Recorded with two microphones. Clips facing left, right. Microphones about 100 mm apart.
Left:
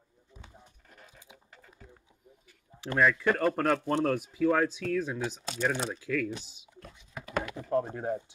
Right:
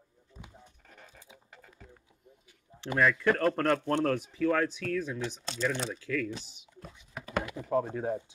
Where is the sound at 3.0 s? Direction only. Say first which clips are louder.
Even; centre (ahead or behind).